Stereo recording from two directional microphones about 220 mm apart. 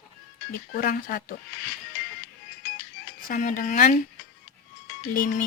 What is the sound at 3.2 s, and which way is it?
Speech, 40° left (ahead or behind).